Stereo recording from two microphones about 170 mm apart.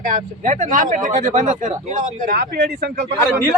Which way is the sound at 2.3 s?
70° right (ahead or behind).